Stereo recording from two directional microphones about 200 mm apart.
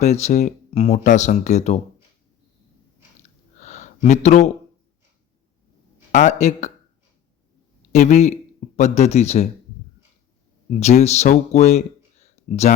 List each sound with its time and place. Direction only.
0.0 s speech: 35° left (ahead or behind)
3.2 s a sound: 35° left (ahead or behind)
6.1 s speech: 40° left (ahead or behind)
7.9 s speech: 35° left (ahead or behind)
10.7 s speech: 35° left (ahead or behind)